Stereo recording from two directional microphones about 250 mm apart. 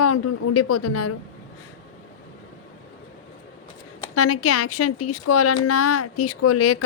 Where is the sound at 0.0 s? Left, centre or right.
Left.